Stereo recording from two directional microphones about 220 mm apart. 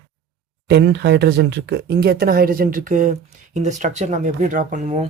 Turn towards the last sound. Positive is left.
turn(degrees=-30)  # may be behind; listen again after turning